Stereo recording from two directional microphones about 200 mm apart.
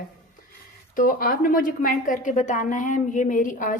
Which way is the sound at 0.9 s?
45° left (ahead or behind).